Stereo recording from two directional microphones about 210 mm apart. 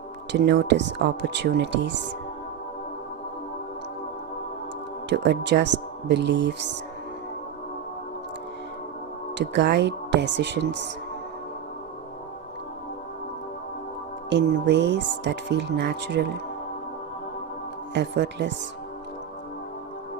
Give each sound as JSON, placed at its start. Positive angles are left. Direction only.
{"t": 0.3, "sound": "speech", "side_deg": -55}
{"t": 5.0, "sound": "speech", "side_deg": -55}
{"t": 9.4, "sound": "speech", "side_deg": -55}
{"t": 14.3, "sound": "speech", "side_deg": -55}
{"t": 17.9, "sound": "speech", "side_deg": -55}